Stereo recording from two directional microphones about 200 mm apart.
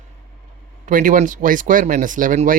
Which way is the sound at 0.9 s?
40° right (ahead or behind).